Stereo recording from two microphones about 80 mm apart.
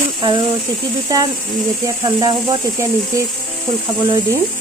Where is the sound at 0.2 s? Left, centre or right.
Right.